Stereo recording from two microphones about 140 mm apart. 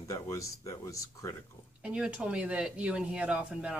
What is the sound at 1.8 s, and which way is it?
Speech, 5° right (ahead or behind).